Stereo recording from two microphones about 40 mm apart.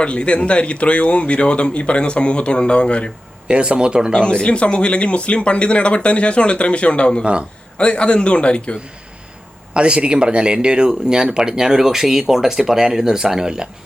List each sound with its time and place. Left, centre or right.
0.0 s speech: left
3.5 s speech: right
4.2 s speech: left
9.7 s speech: right